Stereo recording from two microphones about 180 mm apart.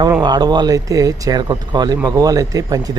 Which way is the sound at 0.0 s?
25° right (ahead or behind).